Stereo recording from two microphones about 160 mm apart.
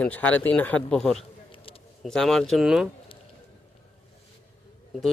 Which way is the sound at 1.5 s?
35° left (ahead or behind).